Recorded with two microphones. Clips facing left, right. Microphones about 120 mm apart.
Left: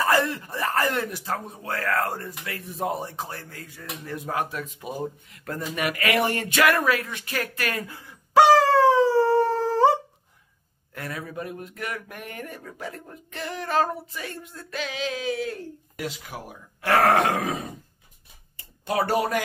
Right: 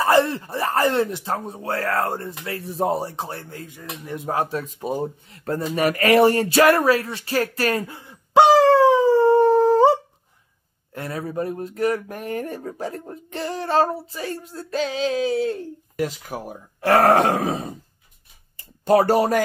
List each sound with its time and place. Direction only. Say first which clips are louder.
0.0 s speech: right 5 dB; 30° right (ahead or behind)
18.9 s speech: right 7 dB; 40° right (ahead or behind)